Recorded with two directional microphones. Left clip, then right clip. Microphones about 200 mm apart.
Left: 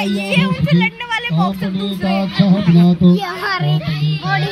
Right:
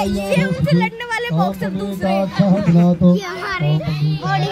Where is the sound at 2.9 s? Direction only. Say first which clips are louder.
Left 1 dB; 55° right (ahead or behind).